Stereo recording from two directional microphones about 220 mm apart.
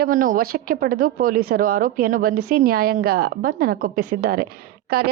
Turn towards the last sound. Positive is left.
turn(degrees=-45)  # may be behind; listen again after turning